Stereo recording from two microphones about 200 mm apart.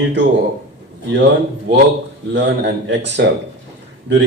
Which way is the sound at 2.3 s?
60° right (ahead or behind).